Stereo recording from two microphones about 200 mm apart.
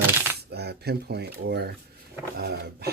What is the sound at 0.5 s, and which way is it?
Speech, 55° right (ahead or behind).